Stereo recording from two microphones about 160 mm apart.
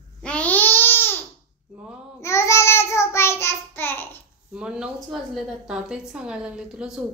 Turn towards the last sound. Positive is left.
turn(degrees=-5)  # may be behind; listen again after turning